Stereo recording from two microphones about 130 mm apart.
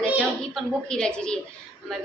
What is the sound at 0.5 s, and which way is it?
Speech, 5° left (ahead or behind).